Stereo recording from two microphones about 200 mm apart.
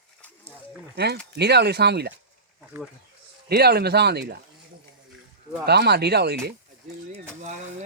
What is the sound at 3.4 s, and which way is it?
Speech, 55° right (ahead or behind).